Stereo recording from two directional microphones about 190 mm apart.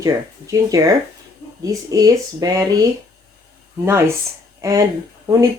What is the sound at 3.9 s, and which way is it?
A woman's voice, 15° right (ahead or behind).